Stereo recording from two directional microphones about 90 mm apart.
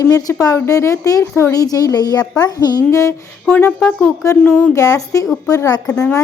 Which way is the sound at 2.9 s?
35° left (ahead or behind).